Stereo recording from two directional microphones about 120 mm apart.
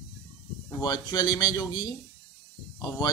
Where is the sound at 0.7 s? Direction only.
35° left (ahead or behind).